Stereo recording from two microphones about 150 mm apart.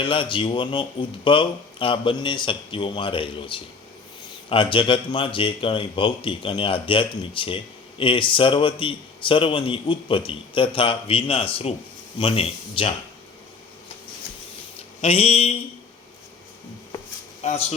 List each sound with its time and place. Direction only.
0.0 s speech: 35° left (ahead or behind)
15.0 s mantra: 45° left (ahead or behind)
17.4 s mantra: 50° left (ahead or behind)